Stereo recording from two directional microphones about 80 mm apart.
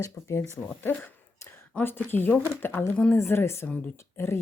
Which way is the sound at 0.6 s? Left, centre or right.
Left.